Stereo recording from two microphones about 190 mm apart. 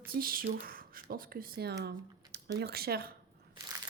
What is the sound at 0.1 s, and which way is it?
Speech, 50° right (ahead or behind).